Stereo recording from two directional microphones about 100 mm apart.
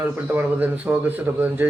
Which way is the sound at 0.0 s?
20° right (ahead or behind).